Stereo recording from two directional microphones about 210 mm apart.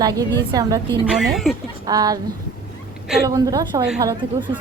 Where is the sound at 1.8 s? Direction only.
20° right (ahead or behind).